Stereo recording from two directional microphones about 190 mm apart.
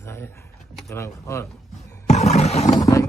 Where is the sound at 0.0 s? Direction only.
15° left (ahead or behind).